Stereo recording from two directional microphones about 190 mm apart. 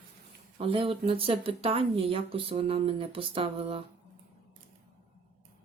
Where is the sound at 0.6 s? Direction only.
30° right (ahead or behind).